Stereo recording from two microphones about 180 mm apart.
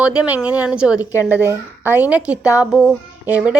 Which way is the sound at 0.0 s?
5° right (ahead or behind).